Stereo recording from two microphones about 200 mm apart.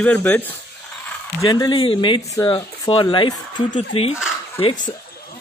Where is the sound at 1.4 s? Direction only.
20° left (ahead or behind).